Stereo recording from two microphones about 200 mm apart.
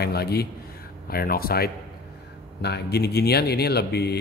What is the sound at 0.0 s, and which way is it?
Speech, 50° left (ahead or behind).